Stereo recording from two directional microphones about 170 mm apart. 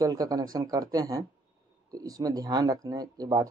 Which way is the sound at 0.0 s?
20° right (ahead or behind).